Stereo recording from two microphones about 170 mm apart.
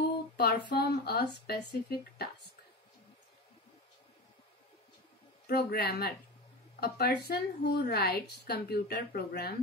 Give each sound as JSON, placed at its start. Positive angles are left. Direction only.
{"t": 0.4, "sound": "a woman's voice", "side_deg": 65}
{"t": 5.5, "sound": "a woman's voice", "side_deg": 70}